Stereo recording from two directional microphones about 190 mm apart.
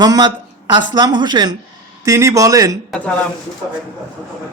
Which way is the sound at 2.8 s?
5° left (ahead or behind).